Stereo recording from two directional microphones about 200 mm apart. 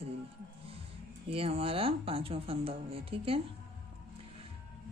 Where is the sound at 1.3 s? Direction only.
30° right (ahead or behind).